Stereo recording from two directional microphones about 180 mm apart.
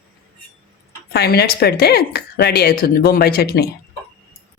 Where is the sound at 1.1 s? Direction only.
60° left (ahead or behind).